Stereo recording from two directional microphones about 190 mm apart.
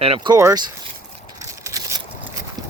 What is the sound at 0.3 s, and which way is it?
Speech, 20° right (ahead or behind).